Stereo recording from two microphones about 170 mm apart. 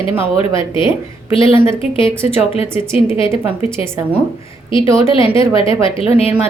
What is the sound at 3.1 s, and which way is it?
Speech, 30° left (ahead or behind).